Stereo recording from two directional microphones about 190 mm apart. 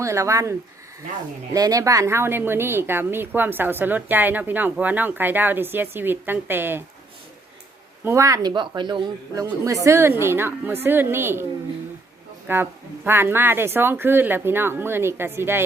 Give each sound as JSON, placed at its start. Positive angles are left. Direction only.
{"t": 0.0, "sound": "speech", "side_deg": -15}
{"t": 1.5, "sound": "speech", "side_deg": -20}
{"t": 8.0, "sound": "a man's voice", "side_deg": -15}
{"t": 12.5, "sound": "speech", "side_deg": -10}